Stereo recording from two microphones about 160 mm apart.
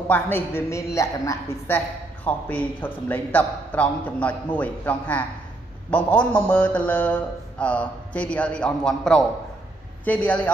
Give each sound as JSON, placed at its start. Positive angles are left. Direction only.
{"t": 0.1, "sound": "mantra", "side_deg": 15}